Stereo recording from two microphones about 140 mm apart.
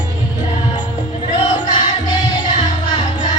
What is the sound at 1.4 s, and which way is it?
Music, 35° left (ahead or behind).